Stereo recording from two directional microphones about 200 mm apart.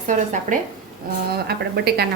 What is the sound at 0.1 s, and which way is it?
Speech, 40° right (ahead or behind).